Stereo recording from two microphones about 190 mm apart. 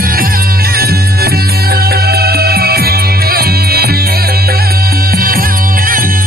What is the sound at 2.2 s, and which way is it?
Music, 55° right (ahead or behind).